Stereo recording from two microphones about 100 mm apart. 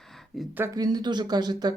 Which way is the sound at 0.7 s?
40° right (ahead or behind).